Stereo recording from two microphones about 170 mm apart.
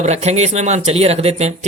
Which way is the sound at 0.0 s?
40° right (ahead or behind).